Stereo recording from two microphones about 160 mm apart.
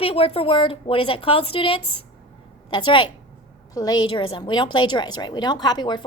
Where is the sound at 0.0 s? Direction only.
35° left (ahead or behind).